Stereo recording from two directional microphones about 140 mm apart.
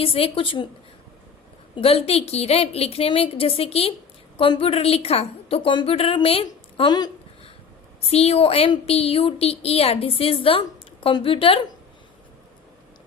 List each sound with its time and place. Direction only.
0.0 s a woman's voice: 40° left (ahead or behind)
1.7 s a woman's voice: 45° left (ahead or behind)
8.0 s a woman's voice: 45° left (ahead or behind)